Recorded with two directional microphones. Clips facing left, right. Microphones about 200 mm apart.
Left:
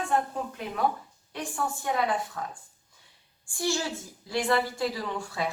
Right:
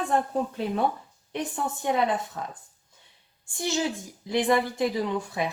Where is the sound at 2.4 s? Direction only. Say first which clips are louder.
Right 1 dB; 20° right (ahead or behind).